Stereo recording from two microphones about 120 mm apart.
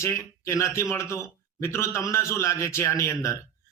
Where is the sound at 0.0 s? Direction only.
25° left (ahead or behind).